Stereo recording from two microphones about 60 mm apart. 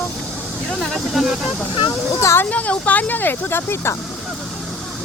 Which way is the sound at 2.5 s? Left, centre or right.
Left.